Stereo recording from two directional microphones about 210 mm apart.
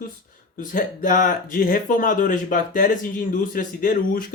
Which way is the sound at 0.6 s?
40° left (ahead or behind).